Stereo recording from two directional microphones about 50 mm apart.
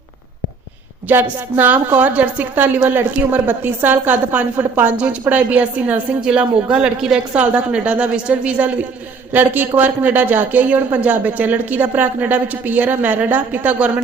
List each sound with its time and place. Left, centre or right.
1.1 s speech: right
6.2 s a woman's voice: right